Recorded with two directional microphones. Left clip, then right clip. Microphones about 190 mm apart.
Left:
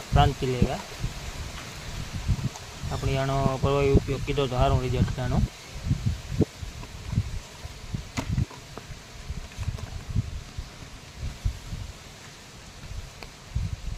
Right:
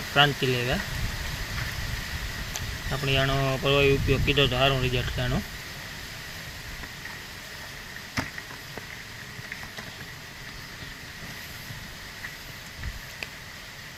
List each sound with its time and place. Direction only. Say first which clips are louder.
0.1 s speech: right 3 dB; 5° left (ahead or behind)
2.9 s speech: right 3 dB; 5° left (ahead or behind)